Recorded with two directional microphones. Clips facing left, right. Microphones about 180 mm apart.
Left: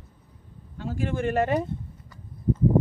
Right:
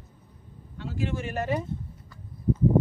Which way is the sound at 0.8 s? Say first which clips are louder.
Left 4 dB; 50° left (ahead or behind).